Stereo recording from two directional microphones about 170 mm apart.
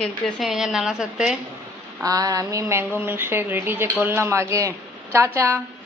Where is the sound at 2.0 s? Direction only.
20° right (ahead or behind).